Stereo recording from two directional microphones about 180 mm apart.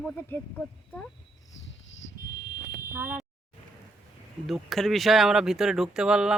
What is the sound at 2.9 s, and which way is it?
Speech, 5° right (ahead or behind).